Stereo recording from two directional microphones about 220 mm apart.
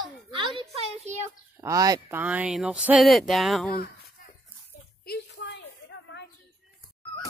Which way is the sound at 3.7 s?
40° left (ahead or behind).